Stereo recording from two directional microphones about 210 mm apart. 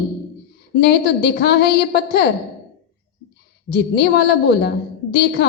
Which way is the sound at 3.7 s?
50° left (ahead or behind).